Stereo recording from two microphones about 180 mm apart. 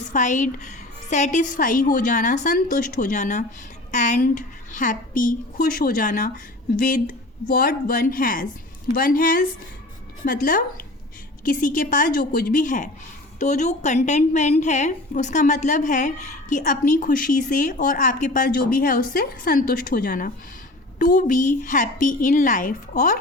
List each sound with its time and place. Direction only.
0.1 s a woman's voice: 45° left (ahead or behind)